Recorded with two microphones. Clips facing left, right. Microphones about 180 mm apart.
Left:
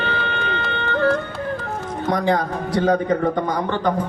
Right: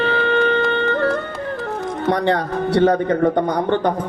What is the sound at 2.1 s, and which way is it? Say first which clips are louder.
A man's voice: right 1 dB; 65° right (ahead or behind).